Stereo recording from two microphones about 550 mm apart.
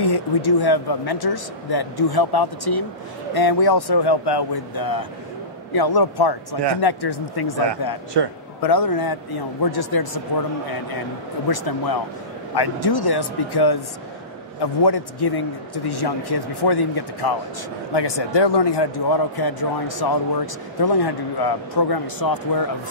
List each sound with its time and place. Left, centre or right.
0.0 s speech: left
11.4 s speech: left